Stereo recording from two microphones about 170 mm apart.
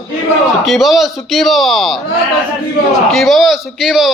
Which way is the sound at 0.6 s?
Centre (ahead or behind).